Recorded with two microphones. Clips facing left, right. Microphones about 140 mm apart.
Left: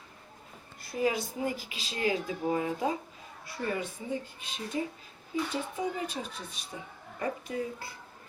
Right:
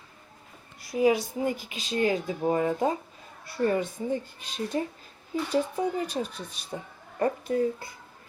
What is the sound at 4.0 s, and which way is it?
Speech, 45° right (ahead or behind).